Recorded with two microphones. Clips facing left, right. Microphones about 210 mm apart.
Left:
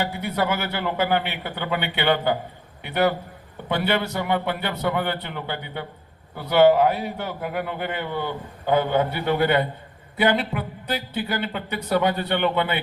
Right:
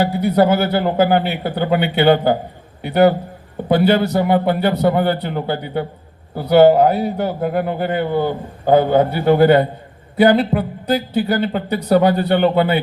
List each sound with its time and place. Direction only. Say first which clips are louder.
0.0 s a man's voice: right 10 dB; 35° right (ahead or behind)